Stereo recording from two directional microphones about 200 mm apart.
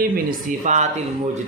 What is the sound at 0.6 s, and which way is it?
Speech, 35° right (ahead or behind).